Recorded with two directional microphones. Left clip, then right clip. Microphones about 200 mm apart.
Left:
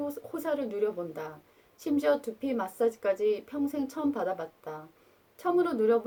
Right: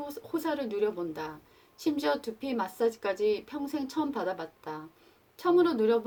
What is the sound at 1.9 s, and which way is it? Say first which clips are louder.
Speech: left 5 dB; 30° right (ahead or behind).